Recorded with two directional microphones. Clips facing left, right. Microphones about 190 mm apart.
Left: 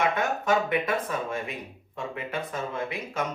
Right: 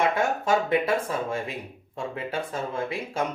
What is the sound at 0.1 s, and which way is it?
Speech, 30° right (ahead or behind).